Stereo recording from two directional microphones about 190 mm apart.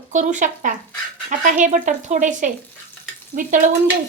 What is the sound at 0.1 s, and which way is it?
Speech, 40° right (ahead or behind).